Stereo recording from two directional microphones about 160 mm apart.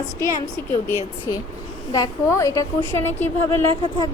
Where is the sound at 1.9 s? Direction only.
20° left (ahead or behind).